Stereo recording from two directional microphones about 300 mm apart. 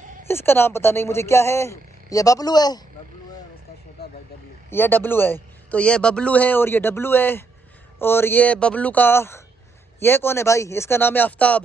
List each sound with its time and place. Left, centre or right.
0.3 s a man's voice: centre
4.0 s vehicle: left
4.6 s a man's voice: centre